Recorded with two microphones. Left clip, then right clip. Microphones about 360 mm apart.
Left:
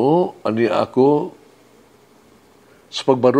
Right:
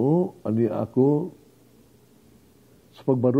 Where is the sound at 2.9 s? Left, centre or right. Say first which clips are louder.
Left 8 dB; centre.